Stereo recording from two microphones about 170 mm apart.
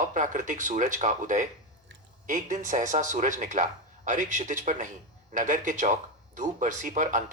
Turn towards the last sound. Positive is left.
turn(degrees=-45)  # may be behind; listen again after turning